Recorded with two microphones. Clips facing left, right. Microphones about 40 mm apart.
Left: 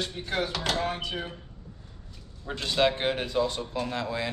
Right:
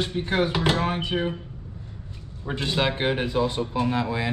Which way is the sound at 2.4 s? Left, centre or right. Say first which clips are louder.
Even; right.